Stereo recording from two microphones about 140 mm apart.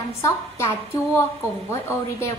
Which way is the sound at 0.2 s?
20° left (ahead or behind).